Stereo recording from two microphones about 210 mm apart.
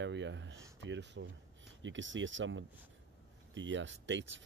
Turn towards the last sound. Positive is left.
turn(degrees=-60)  # may be behind; listen again after turning